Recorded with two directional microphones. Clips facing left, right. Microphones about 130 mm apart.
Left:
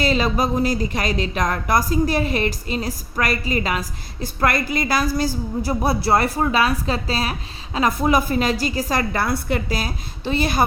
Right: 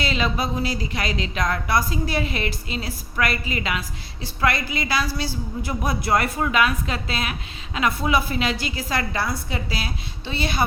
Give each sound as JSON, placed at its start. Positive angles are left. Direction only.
{"t": 0.0, "sound": "a woman's voice", "side_deg": 40}
{"t": 9.2, "sound": "a woman's voice", "side_deg": 55}